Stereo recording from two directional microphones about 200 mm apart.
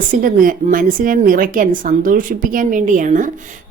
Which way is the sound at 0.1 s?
45° right (ahead or behind).